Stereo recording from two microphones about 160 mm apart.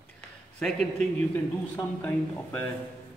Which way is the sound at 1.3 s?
10° left (ahead or behind).